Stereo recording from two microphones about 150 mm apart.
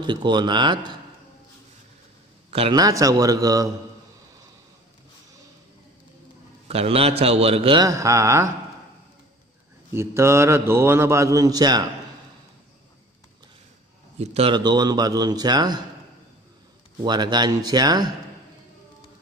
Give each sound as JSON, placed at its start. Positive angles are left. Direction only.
{"t": 0.0, "sound": "a man's voice", "side_deg": -30}
{"t": 2.7, "sound": "speech", "side_deg": -25}
{"t": 6.7, "sound": "a man's voice", "side_deg": -40}
{"t": 7.8, "sound": "speech", "side_deg": -20}
{"t": 9.9, "sound": "speech", "side_deg": -20}
{"t": 14.1, "sound": "a man's voice", "side_deg": -45}
{"t": 14.5, "sound": "speech", "side_deg": -30}
{"t": 17.0, "sound": "speech", "side_deg": -30}